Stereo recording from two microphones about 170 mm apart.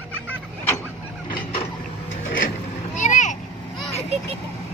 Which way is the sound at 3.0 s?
45° left (ahead or behind).